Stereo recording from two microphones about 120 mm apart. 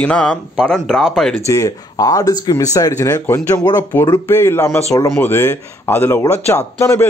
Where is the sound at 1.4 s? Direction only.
25° left (ahead or behind).